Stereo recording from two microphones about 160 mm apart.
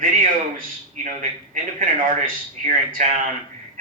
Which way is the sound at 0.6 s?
50° right (ahead or behind).